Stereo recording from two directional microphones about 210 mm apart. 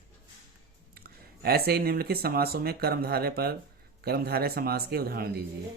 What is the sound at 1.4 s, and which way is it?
Speech, 45° right (ahead or behind).